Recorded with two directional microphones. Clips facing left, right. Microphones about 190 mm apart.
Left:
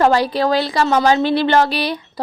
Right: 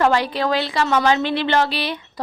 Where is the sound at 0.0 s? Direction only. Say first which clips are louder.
Left 3 dB; 35° left (ahead or behind).